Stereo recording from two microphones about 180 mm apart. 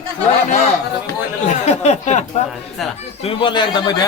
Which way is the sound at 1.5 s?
40° left (ahead or behind).